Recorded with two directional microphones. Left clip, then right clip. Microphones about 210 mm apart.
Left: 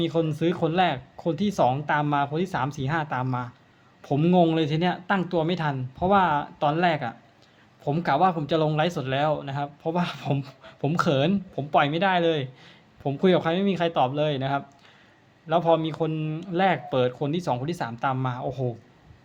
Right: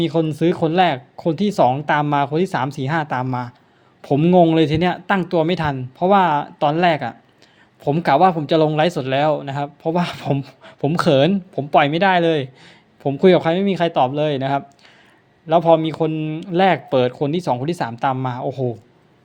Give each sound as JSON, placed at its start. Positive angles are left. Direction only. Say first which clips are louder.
{"t": 0.0, "sound": "speech", "louder": "right 6 dB", "side_deg": -20}